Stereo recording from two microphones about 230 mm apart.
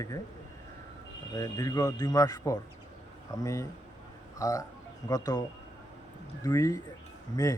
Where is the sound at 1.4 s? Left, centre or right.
Centre.